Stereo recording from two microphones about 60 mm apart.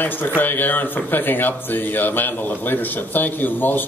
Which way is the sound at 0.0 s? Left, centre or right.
Left.